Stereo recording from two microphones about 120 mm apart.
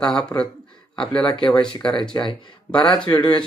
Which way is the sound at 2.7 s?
45° left (ahead or behind).